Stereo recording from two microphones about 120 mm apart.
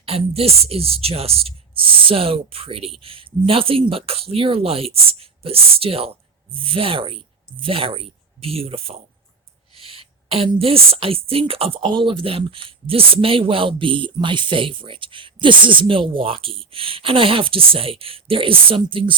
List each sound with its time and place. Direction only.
0.0 s a woman's voice: 55° right (ahead or behind)